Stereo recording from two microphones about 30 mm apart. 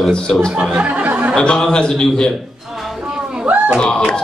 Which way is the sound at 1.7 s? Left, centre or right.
Left.